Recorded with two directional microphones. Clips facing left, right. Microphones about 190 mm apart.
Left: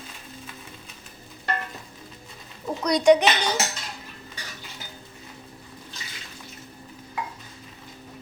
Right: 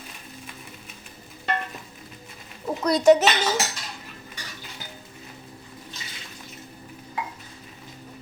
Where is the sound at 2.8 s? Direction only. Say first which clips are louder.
Right 1 dB; 5° right (ahead or behind).